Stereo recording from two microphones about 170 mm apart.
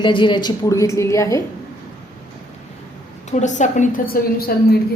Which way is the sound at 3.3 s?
45° left (ahead or behind).